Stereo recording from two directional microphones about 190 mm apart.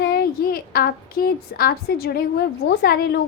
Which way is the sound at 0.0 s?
55° left (ahead or behind).